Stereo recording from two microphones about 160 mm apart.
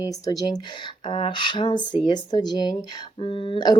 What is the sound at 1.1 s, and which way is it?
Speech, 30° left (ahead or behind).